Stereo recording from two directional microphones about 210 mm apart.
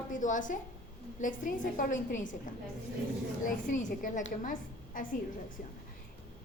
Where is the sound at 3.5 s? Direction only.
40° left (ahead or behind).